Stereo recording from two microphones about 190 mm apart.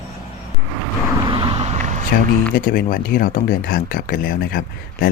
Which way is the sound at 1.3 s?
30° right (ahead or behind).